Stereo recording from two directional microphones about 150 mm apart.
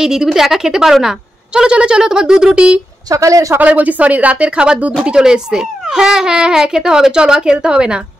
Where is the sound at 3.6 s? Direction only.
10° right (ahead or behind).